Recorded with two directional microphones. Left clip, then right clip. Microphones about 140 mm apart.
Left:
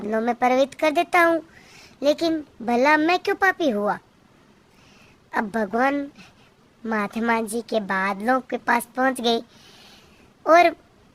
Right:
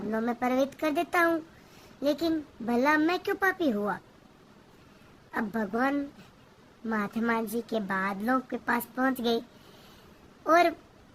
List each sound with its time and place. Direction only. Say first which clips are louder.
0.1 s a woman's voice: left 9 dB; 45° left (ahead or behind)
5.3 s a woman's voice: left 8 dB; 50° left (ahead or behind)
10.4 s a woman's voice: left 7 dB; 45° left (ahead or behind)